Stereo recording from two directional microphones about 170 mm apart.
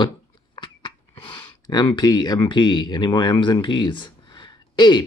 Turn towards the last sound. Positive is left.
turn(degrees=25)  # may be behind; listen again after turning